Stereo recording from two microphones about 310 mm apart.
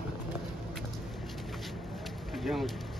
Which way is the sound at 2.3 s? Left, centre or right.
Centre.